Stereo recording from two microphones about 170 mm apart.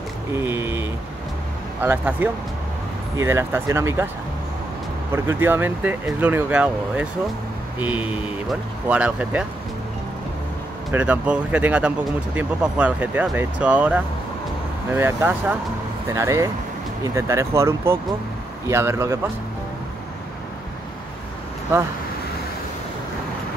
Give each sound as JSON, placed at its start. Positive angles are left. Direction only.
{"t": 0.4, "sound": "speech", "side_deg": -15}
{"t": 5.1, "sound": "speech", "side_deg": -15}
{"t": 10.9, "sound": "speech", "side_deg": -10}